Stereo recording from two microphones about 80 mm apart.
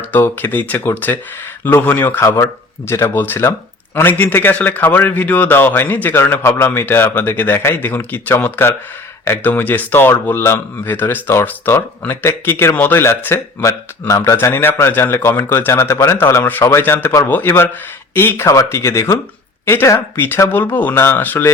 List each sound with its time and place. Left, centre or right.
0.1 s speech: left
2.4 s a man's voice: left
18.4 s a man's voice: left